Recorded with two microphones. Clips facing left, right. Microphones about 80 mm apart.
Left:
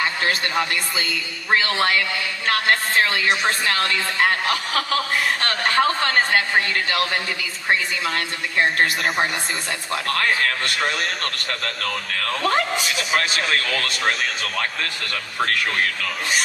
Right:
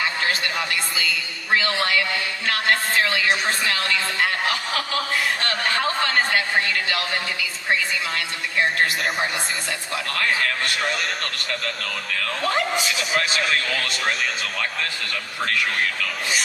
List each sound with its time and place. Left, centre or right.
0.4 s a man's voice: left
5.5 s a man's voice: left